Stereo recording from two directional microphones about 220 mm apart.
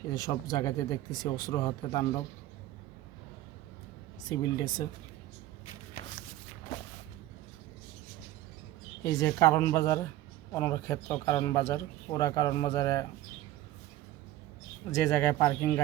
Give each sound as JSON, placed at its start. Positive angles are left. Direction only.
{"t": 0.1, "sound": "speech", "side_deg": 15}
{"t": 4.3, "sound": "speech", "side_deg": 20}
{"t": 9.0, "sound": "speech", "side_deg": 15}
{"t": 14.9, "sound": "speech", "side_deg": 15}